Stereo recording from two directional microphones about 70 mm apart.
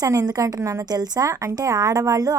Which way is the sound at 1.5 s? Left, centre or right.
Right.